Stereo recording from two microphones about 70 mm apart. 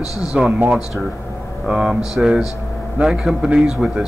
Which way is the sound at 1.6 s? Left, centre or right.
Centre.